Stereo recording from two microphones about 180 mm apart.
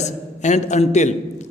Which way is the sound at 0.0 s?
40° left (ahead or behind).